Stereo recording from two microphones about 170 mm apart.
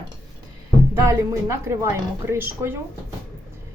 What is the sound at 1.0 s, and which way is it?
A woman's voice, 15° right (ahead or behind).